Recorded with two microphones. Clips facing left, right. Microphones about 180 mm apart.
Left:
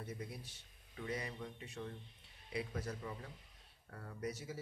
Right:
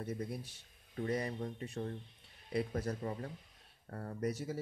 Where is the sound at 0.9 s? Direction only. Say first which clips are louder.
Right 7 dB; 45° right (ahead or behind).